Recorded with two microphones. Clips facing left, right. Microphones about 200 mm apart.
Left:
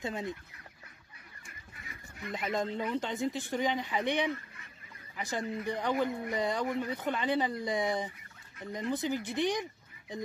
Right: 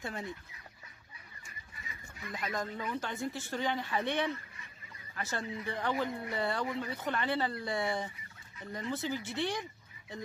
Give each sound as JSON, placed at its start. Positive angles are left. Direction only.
{"t": 0.0, "sound": "speech", "side_deg": 20}
{"t": 1.8, "sound": "fowl", "side_deg": 55}
{"t": 2.3, "sound": "speech", "side_deg": 25}